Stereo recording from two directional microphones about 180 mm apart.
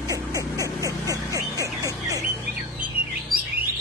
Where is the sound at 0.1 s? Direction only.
20° right (ahead or behind).